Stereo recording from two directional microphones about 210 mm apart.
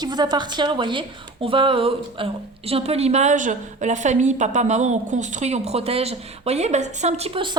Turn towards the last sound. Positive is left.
turn(degrees=-25)  # may be behind; listen again after turning